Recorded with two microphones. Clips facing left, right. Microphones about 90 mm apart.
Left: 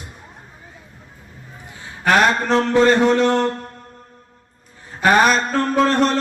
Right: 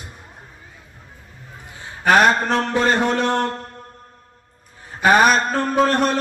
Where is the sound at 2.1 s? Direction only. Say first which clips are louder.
Even; 15° right (ahead or behind).